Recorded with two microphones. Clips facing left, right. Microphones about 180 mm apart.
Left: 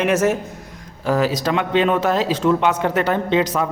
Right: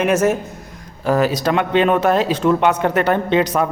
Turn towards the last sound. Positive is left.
turn(degrees=-60)  # may be behind; listen again after turning